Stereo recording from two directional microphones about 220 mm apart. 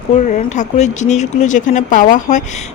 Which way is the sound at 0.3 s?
35° left (ahead or behind).